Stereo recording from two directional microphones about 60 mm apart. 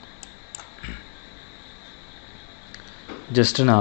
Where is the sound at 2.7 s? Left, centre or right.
Right.